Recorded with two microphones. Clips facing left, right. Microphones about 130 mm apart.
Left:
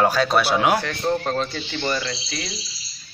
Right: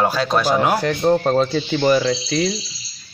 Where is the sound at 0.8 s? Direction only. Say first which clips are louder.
Right 6 dB; 40° right (ahead or behind).